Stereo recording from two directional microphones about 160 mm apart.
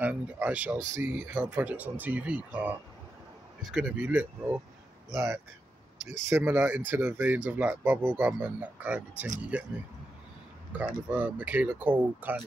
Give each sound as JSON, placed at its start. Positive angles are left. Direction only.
{"t": 0.0, "sound": "speech", "side_deg": -10}
{"t": 3.7, "sound": "speech", "side_deg": -5}
{"t": 10.7, "sound": "speech", "side_deg": -10}